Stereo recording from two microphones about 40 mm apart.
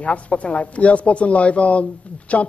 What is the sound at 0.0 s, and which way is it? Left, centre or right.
Speech, left.